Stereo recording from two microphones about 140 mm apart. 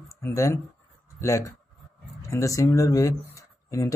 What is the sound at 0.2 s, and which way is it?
Speech, 20° left (ahead or behind).